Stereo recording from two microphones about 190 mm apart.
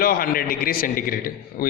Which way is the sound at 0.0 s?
50° left (ahead or behind).